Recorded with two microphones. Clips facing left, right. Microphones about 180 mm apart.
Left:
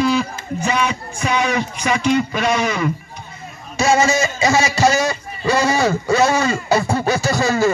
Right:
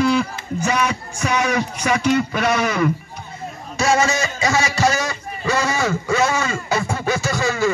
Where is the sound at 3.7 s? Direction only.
25° left (ahead or behind).